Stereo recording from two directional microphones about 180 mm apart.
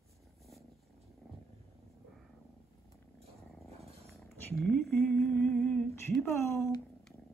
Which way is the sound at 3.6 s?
Centre (ahead or behind).